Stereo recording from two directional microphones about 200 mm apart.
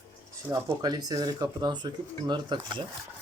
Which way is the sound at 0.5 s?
20° right (ahead or behind).